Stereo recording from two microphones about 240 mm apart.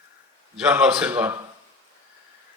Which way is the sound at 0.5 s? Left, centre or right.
Centre.